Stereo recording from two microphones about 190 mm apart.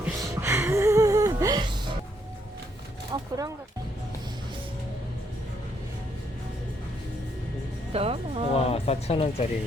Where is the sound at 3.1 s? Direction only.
20° right (ahead or behind).